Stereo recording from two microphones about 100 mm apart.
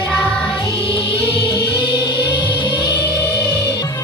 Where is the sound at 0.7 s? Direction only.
65° left (ahead or behind); by 4.0 s 40° left (ahead or behind).